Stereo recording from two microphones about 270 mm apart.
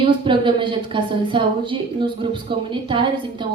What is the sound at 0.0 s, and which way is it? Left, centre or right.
Speech, centre.